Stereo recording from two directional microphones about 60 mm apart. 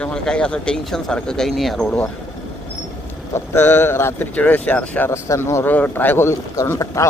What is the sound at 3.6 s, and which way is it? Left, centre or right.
Speech, left.